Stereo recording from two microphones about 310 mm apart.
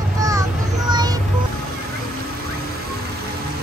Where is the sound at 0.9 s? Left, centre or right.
Centre.